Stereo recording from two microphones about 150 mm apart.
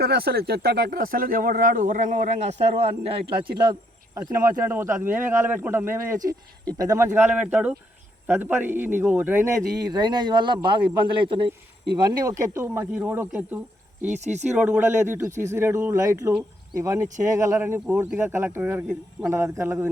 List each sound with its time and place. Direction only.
0.0 s speech: 90° right; by 3.2 s 45° right (ahead or behind)
3.6 s cricket: 30° right (ahead or behind)
4.2 s speech: 20° right (ahead or behind)
9.9 s speech: 30° right (ahead or behind); by 13.6 s 10° right (ahead or behind)
14.2 s speech: 50° right (ahead or behind)
14.4 s speech: 10° right (ahead or behind)